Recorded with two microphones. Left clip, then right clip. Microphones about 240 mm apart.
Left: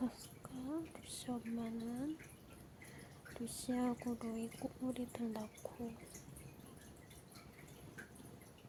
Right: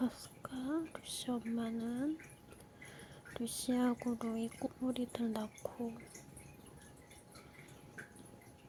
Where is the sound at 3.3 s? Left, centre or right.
Centre.